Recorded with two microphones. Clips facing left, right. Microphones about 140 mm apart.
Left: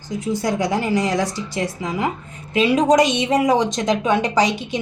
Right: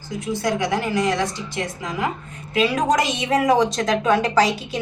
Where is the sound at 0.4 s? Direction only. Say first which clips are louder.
Even; 10° left (ahead or behind).